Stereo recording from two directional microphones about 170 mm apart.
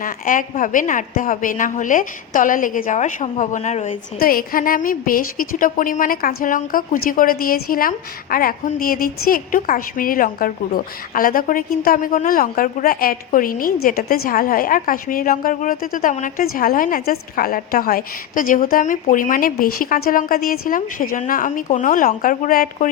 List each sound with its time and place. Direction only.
0.0 s a woman's voice: 50° left (ahead or behind)
4.2 s a woman's voice: 60° left (ahead or behind)